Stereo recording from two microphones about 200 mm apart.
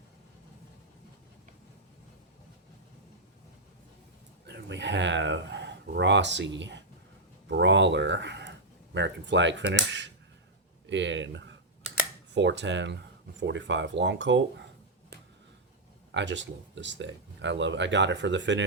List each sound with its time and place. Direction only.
4.4 s speech: 60° right (ahead or behind)
16.1 s speech: 60° right (ahead or behind)